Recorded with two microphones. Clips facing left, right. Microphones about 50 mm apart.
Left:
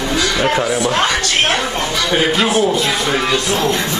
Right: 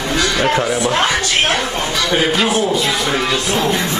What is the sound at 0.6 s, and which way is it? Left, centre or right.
Speech, right.